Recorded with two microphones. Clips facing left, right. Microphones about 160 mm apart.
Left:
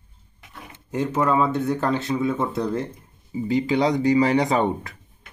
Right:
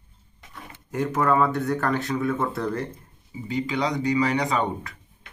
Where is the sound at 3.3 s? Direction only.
35° left (ahead or behind).